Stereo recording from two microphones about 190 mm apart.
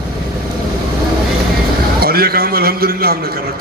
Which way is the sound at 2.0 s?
55° right (ahead or behind).